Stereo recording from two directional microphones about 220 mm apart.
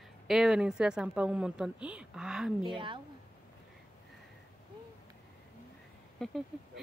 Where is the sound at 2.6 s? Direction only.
20° right (ahead or behind).